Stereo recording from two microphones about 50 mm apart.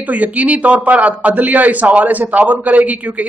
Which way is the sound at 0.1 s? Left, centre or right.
Right.